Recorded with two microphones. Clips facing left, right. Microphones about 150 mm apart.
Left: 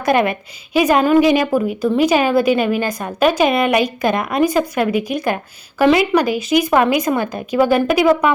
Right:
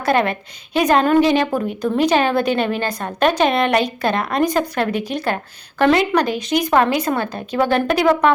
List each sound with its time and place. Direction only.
0.0 s a woman's voice: 15° left (ahead or behind)